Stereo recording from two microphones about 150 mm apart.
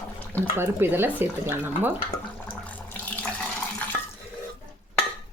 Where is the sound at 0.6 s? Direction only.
15° right (ahead or behind).